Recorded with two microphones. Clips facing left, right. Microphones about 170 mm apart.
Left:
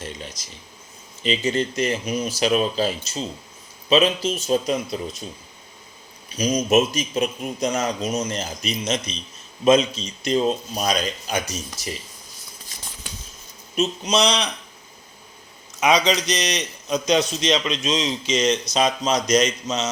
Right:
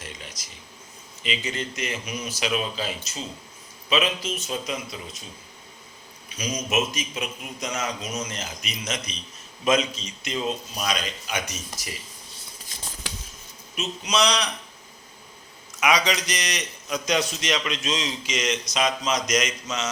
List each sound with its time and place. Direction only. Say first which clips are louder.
0.4 s a man's voice: left 2 dB; 25° left (ahead or behind)
6.2 s a man's voice: left 8 dB; 30° left (ahead or behind)
13.0 s a sound: right 3 dB; 90° right
14.1 s a man's voice: even; 25° left (ahead or behind)
15.8 s a man's voice: left 4 dB; 25° left (ahead or behind)